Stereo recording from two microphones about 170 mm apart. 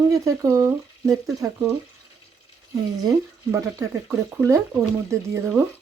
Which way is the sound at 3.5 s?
10° right (ahead or behind).